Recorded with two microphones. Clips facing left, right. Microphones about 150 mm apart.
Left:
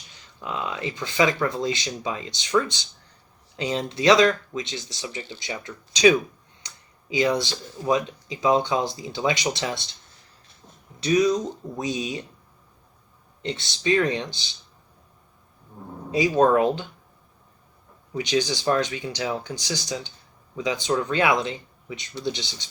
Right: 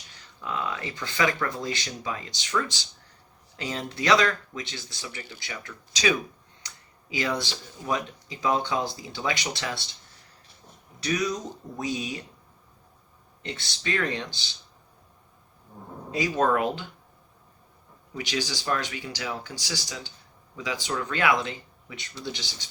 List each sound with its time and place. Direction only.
0.4 s speech: 20° left (ahead or behind)
3.6 s speech: 20° left (ahead or behind)
11.0 s speech: 20° left (ahead or behind)
13.4 s speech: 20° left (ahead or behind)
16.3 s speech: 35° left (ahead or behind)
18.2 s speech: 20° left (ahead or behind)